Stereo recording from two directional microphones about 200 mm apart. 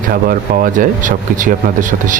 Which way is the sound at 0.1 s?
45° right (ahead or behind).